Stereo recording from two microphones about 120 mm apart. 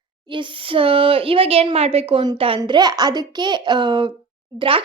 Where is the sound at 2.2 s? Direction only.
45° right (ahead or behind).